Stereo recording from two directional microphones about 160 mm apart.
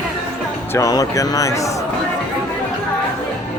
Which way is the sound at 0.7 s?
20° left (ahead or behind).